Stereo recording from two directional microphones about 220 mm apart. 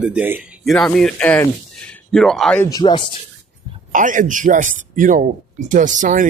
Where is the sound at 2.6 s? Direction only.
20° left (ahead or behind).